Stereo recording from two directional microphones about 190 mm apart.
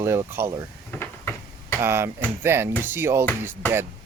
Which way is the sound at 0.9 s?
10° left (ahead or behind).